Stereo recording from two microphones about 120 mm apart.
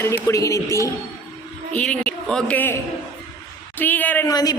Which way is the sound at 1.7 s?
10° left (ahead or behind).